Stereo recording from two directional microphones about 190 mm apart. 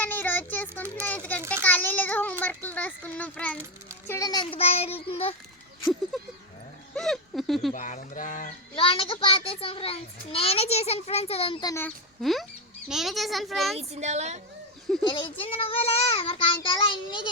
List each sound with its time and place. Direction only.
0.0 s child singing: 10° left (ahead or behind)
0.7 s a sound: 10° right (ahead or behind)
1.0 s a child's voice: 10° left (ahead or behind); by 5.3 s 30° left (ahead or behind)
6.9 s a child's voice: centre (ahead or behind)
7.7 s speech: 45° left (ahead or behind)
8.7 s a child's voice: 30° left (ahead or behind)
11.7 s a child's voice: 10° left (ahead or behind)
12.2 s a child's voice: centre (ahead or behind)
13.7 s speech: 35° right (ahead or behind)
15.0 s a child's voice: 25° left (ahead or behind)